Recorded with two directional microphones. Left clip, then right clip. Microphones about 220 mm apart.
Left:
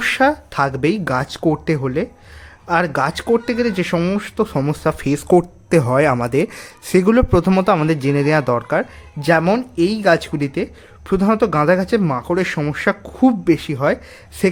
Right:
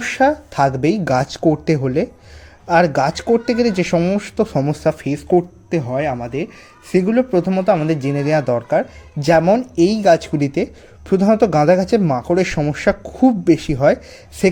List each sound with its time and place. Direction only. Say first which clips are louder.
0.0 s speech: even; 5° left (ahead or behind)
4.9 s speech: left 3 dB; 20° left (ahead or behind)
5.3 s speech: left 3 dB; 35° left (ahead or behind); by 14.0 s 5° right (ahead or behind)